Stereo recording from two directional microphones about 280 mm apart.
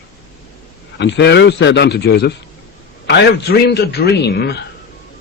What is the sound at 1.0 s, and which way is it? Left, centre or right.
Speech, left.